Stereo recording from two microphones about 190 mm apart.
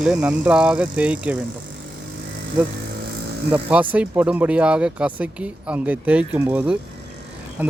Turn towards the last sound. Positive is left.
turn(degrees=-10)  # may be behind; listen again after turning